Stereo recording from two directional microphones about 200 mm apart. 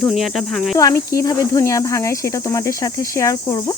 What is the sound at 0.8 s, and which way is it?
Speech, 15° left (ahead or behind).